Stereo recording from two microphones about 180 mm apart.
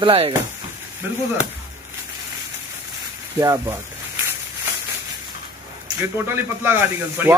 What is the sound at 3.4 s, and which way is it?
Speech, 20° right (ahead or behind).